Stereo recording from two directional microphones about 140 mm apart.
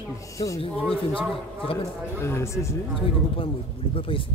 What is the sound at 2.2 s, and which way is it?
Speech, 20° left (ahead or behind).